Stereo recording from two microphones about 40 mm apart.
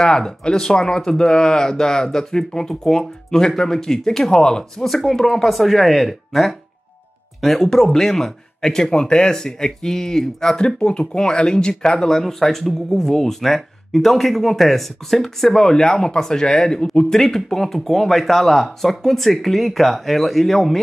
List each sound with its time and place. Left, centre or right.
0.0 s speech: centre
4.8 s speech: centre